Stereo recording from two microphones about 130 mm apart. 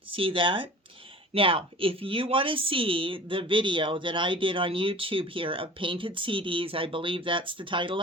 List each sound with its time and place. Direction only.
0.1 s a woman's voice: 45° right (ahead or behind)